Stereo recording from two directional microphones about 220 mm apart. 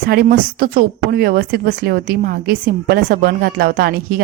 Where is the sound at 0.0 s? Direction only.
45° right (ahead or behind).